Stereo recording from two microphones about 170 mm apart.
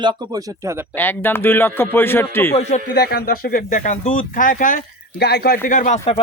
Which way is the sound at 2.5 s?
40° left (ahead or behind).